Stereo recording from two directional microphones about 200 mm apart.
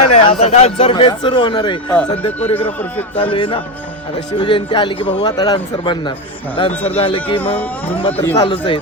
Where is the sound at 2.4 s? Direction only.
10° left (ahead or behind).